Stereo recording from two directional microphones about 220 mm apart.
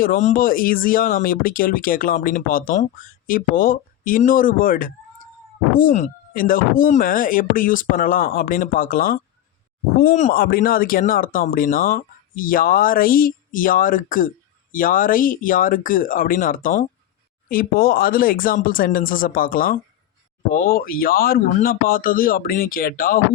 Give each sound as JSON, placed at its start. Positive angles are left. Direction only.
{"t": 0.0, "sound": "speech", "side_deg": 35}